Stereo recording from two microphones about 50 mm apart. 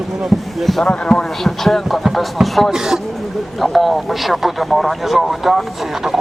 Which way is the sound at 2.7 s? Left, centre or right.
Centre.